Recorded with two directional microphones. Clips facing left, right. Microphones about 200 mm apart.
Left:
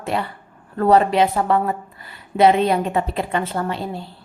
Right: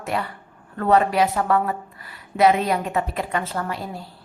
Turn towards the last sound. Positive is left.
turn(degrees=25)  # may be behind; listen again after turning